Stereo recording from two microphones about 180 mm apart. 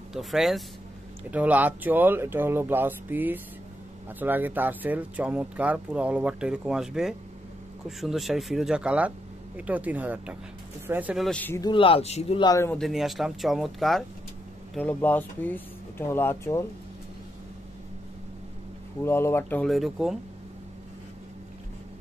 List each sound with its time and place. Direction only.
0.1 s speech: centre (ahead or behind)
11.2 s speech: 10° left (ahead or behind)
11.6 s speech: 30° left (ahead or behind)
12.4 s speech: 15° left (ahead or behind)
12.7 s speech: centre (ahead or behind)
19.0 s speech: 15° left (ahead or behind)